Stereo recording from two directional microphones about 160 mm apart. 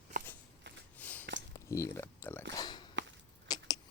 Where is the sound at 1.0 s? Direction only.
10° left (ahead or behind).